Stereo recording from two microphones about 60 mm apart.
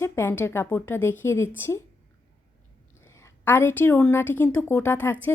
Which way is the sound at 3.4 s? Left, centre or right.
Left.